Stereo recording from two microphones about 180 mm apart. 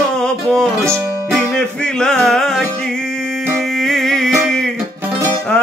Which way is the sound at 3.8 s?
Centre (ahead or behind).